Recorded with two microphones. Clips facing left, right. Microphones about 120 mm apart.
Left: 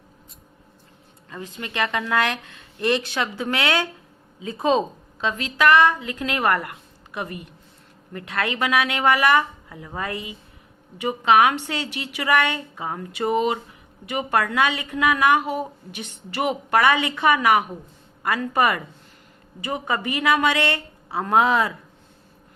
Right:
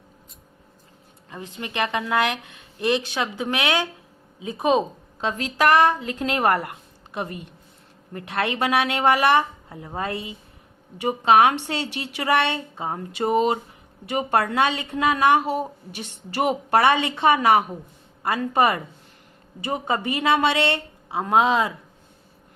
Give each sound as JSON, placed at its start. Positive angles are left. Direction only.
{"t": 1.3, "sound": "speech", "side_deg": -20}
{"t": 5.2, "sound": "a woman's voice", "side_deg": -35}